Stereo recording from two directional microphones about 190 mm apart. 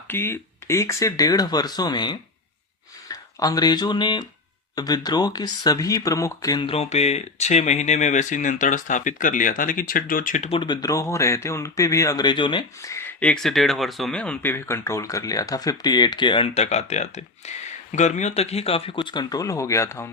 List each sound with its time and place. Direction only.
0.1 s speech: 10° left (ahead or behind)